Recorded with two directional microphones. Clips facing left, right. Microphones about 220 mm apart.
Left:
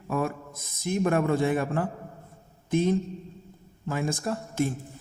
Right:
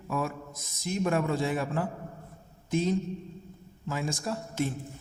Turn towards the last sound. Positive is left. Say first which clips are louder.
# left 3 dB
turn(degrees=55)  # may be behind; listen again after turning